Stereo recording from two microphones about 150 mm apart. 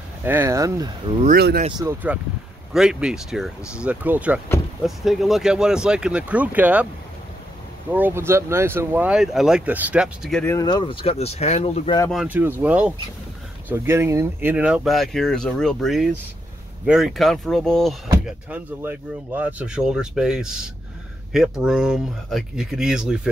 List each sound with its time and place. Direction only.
0.2 s speech: 15° right (ahead or behind)
1.3 s speech: 90° right
2.1 s speech: 10° right (ahead or behind)
7.9 s speech: 15° right (ahead or behind)
10.4 s speech: 20° left (ahead or behind); by 11.9 s 45° left (ahead or behind)
12.3 s speech: 10° right (ahead or behind); by 17.9 s 5° left (ahead or behind)
18.2 s speech: 10° right (ahead or behind)